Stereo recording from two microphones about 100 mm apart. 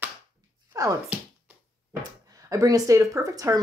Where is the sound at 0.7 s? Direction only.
35° right (ahead or behind).